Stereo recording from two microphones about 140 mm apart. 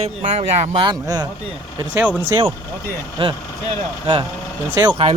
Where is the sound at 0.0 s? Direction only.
45° right (ahead or behind).